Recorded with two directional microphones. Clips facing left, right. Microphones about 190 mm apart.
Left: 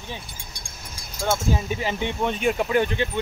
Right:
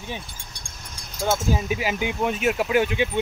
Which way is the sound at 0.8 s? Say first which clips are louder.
Right 1 dB; 5° left (ahead or behind).